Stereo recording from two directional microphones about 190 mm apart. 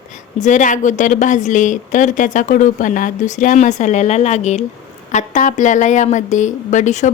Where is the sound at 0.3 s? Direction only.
40° left (ahead or behind).